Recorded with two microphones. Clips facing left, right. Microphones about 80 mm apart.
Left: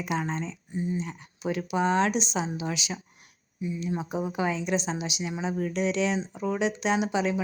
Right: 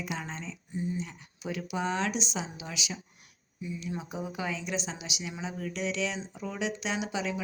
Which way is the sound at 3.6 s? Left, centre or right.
Left.